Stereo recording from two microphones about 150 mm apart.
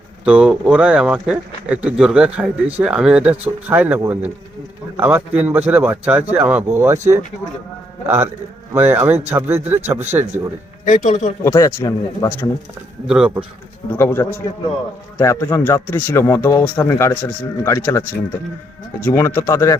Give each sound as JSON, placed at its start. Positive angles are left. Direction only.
{"t": 0.3, "sound": "speech", "side_deg": -5}
{"t": 8.0, "sound": "speech", "side_deg": -15}
{"t": 10.8, "sound": "speech", "side_deg": 55}
{"t": 11.4, "sound": "speech", "side_deg": 20}
{"t": 13.1, "sound": "speech", "side_deg": -5}
{"t": 13.9, "sound": "a man's voice", "side_deg": 15}
{"t": 19.0, "sound": "a man's voice", "side_deg": 15}